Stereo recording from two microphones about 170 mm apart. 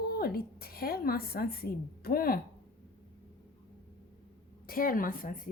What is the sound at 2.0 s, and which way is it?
Speech, 60° left (ahead or behind).